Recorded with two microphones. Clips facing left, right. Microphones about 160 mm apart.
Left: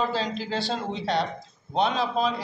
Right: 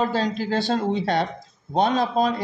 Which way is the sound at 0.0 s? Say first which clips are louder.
Right 4 dB; 45° right (ahead or behind).